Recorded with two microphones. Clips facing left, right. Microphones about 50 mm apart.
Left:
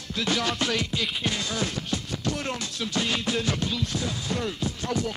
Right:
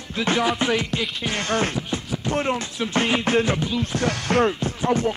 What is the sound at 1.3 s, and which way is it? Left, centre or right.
Music, right.